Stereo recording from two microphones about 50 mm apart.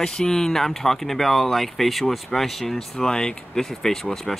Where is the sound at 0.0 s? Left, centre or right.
Centre.